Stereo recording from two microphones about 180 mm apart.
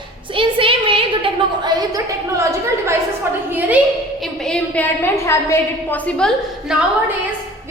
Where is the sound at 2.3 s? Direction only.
15° right (ahead or behind).